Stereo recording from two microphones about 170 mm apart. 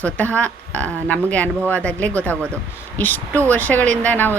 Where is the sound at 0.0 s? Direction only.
10° left (ahead or behind).